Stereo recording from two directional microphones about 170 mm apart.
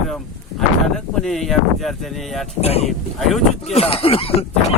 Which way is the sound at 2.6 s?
35° left (ahead or behind).